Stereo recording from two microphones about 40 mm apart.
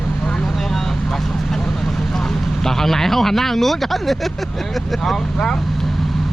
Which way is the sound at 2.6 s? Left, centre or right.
Centre.